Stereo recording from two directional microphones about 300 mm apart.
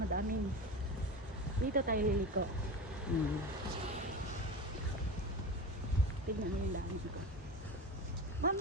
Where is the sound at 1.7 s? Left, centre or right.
Right.